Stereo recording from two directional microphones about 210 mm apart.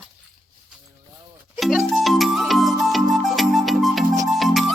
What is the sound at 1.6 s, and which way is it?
Music, centre (ahead or behind).